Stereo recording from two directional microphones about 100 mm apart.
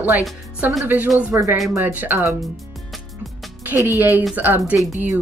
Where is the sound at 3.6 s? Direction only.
20° right (ahead or behind).